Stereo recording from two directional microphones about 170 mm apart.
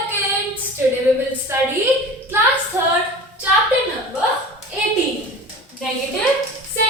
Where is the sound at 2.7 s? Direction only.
10° right (ahead or behind).